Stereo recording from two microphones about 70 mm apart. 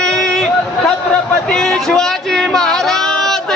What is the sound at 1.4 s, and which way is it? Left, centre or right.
Music, centre.